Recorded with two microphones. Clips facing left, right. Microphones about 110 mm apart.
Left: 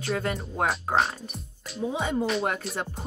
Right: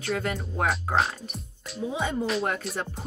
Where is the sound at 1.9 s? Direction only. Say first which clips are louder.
Left 1 dB; 30° left (ahead or behind).